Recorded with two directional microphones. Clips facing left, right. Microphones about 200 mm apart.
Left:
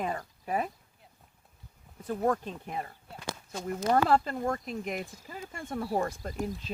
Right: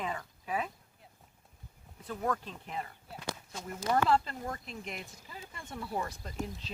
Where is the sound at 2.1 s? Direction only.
45° left (ahead or behind).